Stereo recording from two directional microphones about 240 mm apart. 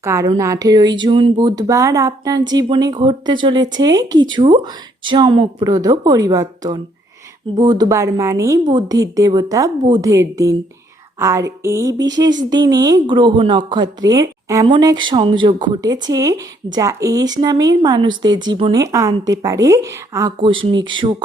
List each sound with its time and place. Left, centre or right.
0.0 s a woman's voice: centre